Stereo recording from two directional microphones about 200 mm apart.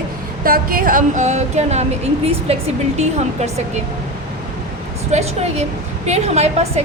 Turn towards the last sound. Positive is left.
turn(degrees=-35)  # may be behind; listen again after turning